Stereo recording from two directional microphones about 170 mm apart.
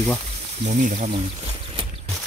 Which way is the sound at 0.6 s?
50° right (ahead or behind).